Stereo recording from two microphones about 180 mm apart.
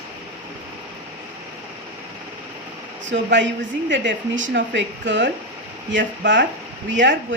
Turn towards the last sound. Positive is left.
turn(degrees=-90)